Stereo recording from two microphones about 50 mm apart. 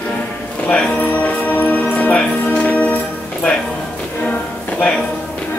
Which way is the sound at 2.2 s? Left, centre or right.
Left.